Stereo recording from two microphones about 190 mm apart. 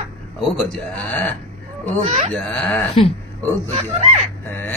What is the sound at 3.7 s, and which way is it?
Speech, 35° right (ahead or behind).